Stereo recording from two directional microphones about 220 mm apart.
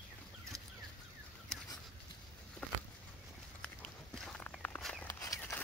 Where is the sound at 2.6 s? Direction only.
5° left (ahead or behind).